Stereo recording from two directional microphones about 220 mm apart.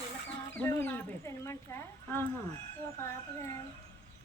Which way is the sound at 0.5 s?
10° left (ahead or behind).